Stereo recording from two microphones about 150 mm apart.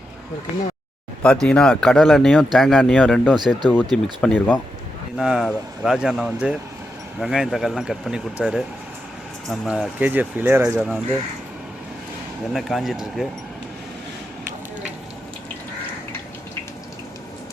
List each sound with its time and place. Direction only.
1.2 s speech: 5° left (ahead or behind)
3.3 s speech: 30° right (ahead or behind)
3.9 s speech: 10° left (ahead or behind)
5.1 s speech: 5° right (ahead or behind)
12.5 s speech: centre (ahead or behind)